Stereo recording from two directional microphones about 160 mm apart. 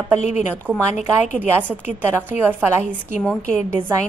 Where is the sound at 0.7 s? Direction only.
10° right (ahead or behind).